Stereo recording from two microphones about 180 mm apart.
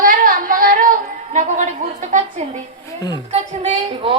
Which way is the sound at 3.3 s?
35° right (ahead or behind).